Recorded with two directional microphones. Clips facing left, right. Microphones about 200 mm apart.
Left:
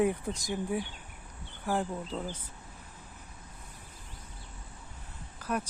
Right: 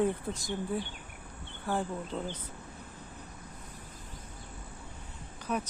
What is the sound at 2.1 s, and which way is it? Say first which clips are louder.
Speech: even; 10° left (ahead or behind).